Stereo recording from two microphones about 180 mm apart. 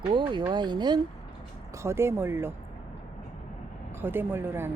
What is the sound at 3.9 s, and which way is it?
Speech, 10° right (ahead or behind).